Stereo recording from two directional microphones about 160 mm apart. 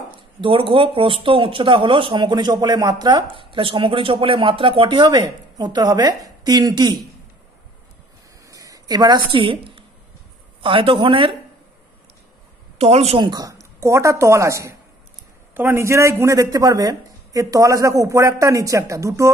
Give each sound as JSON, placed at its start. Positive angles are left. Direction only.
{"t": 0.1, "sound": "speech", "side_deg": -35}
{"t": 8.5, "sound": "a sound", "side_deg": -20}
{"t": 10.6, "sound": "speech", "side_deg": -35}
{"t": 12.7, "sound": "speech", "side_deg": -40}